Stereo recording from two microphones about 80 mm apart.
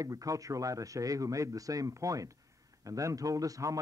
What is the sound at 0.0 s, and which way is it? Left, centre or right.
A man's voice, right.